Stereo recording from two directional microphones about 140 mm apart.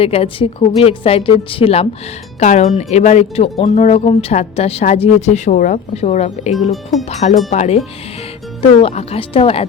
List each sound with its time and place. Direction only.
0.0 s a woman's voice: 45° left (ahead or behind)
2.4 s a woman's voice: 55° left (ahead or behind)
6.5 s speech: centre (ahead or behind)
7.1 s a woman's voice: 55° left (ahead or behind)